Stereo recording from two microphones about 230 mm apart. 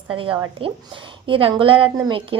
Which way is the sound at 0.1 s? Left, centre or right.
Right.